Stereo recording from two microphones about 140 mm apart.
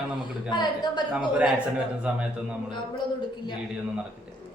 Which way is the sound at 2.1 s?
10° right (ahead or behind).